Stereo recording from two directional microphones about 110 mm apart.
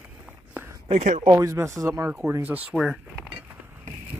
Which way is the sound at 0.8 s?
90° right.